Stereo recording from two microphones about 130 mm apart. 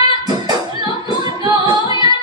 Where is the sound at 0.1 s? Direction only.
35° right (ahead or behind).